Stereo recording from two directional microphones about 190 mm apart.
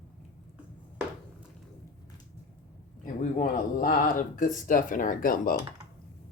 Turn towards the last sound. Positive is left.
turn(degrees=45)  # may be behind; listen again after turning